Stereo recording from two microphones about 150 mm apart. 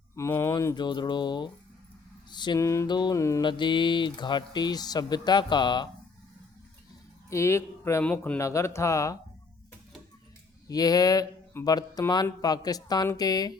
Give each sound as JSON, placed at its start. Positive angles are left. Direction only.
{"t": 0.2, "sound": "speech", "side_deg": 15}
{"t": 3.4, "sound": "speech", "side_deg": 30}
{"t": 7.3, "sound": "speech", "side_deg": 20}
{"t": 10.7, "sound": "speech", "side_deg": 25}